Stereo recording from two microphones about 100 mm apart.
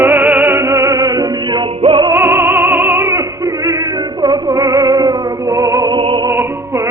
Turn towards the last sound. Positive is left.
turn(degrees=-55)  # may be behind; listen again after turning